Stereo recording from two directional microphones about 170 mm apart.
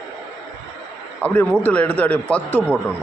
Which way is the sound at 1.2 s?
10° left (ahead or behind).